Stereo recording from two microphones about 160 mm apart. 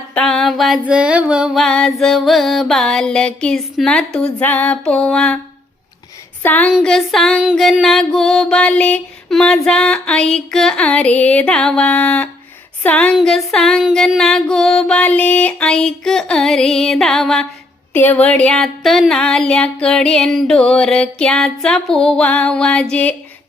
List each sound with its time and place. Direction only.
0.1 s music: 5° left (ahead or behind)
6.4 s a sound: 10° left (ahead or behind)
6.7 s music: centre (ahead or behind)